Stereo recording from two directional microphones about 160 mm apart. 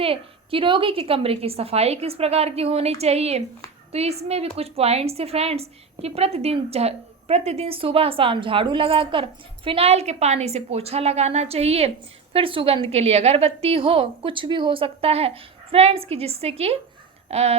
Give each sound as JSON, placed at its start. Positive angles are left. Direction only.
{"t": 0.0, "sound": "a woman's voice", "side_deg": -35}